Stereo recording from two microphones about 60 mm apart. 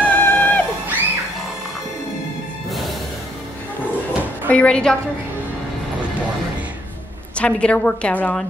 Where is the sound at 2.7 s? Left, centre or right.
Centre.